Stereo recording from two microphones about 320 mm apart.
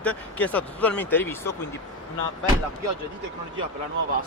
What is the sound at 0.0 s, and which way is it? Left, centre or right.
Speech, centre.